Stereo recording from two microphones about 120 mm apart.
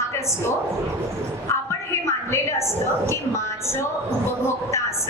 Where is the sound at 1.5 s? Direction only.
25° left (ahead or behind).